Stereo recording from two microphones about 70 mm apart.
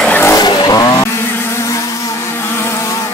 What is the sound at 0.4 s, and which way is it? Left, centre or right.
Vehicle, left.